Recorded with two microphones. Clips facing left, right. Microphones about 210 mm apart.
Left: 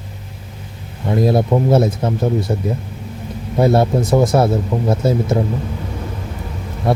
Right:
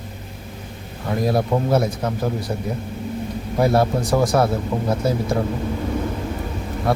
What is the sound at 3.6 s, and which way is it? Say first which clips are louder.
Speech: left 4 dB; 25° left (ahead or behind).